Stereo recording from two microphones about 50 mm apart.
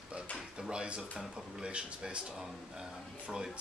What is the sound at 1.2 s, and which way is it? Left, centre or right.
Speech, centre.